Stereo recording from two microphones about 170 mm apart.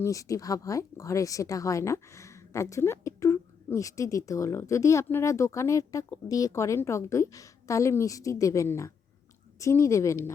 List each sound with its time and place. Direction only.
0.0 s a woman's voice: 20° left (ahead or behind)